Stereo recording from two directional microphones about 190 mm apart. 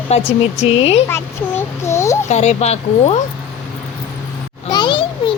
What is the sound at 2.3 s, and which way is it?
Speech, 35° left (ahead or behind).